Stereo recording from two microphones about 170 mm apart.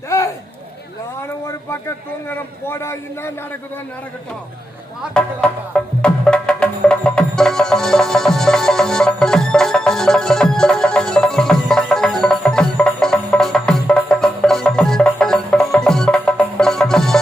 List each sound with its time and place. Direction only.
2.3 s a man's voice: 15° left (ahead or behind)
5.1 s music: 5° left (ahead or behind)